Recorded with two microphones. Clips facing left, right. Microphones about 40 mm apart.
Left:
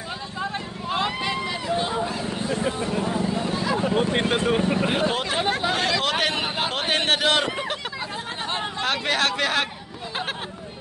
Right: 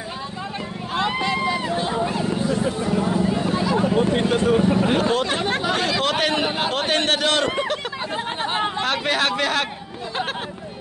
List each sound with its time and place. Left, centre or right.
0.9 s vehicle: centre
4.1 s vehicle: left
4.8 s a sound: centre
7.5 s hubbub: centre
8.8 s a man's voice: centre